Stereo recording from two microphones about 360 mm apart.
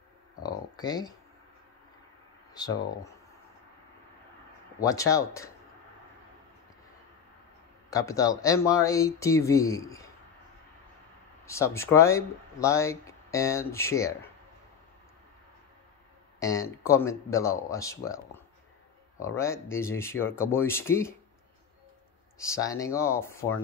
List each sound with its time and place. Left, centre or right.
0.4 s a sound: centre
2.5 s speech: centre
4.7 s speech: centre
7.9 s speech: centre
11.4 s speech: centre
16.3 s speech: centre
22.4 s speech: centre